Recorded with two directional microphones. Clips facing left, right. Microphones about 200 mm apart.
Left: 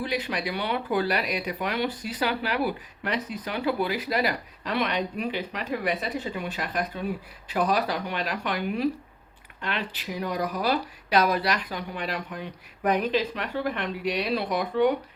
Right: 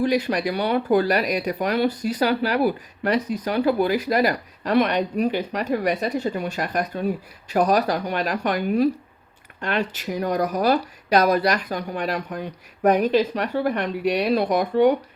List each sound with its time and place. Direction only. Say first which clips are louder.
0.0 s speech: right 8 dB; 45° right (ahead or behind)